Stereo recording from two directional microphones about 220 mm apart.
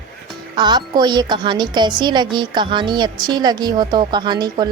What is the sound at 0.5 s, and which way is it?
A woman's voice, 20° right (ahead or behind).